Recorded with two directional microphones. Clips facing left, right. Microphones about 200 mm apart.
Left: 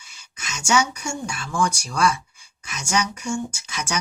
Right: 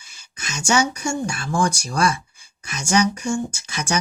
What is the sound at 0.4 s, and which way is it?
Speech, 35° right (ahead or behind).